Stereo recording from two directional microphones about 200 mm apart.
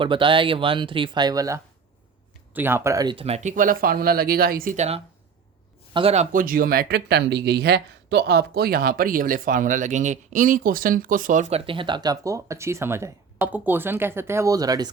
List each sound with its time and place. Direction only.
0.0 s speech: 25° right (ahead or behind)
6.3 s speech: 45° right (ahead or behind); by 14.8 s 20° right (ahead or behind)